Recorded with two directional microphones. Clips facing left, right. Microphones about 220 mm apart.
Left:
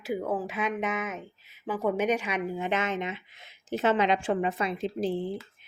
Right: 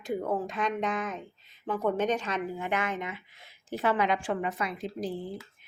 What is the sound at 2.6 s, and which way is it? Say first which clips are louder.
A woman's voice: left 2 dB; 20° left (ahead or behind).